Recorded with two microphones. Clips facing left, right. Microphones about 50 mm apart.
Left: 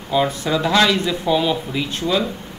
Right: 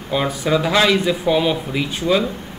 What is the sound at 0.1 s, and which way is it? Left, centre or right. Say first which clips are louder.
Speech: even; centre.